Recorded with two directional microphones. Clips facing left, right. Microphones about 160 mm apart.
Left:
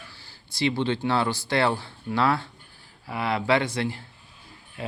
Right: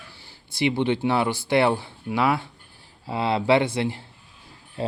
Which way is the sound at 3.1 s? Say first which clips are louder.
Right 3 dB; 25° right (ahead or behind).